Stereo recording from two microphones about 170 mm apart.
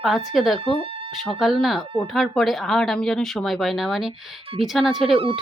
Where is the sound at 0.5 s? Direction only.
35° right (ahead or behind).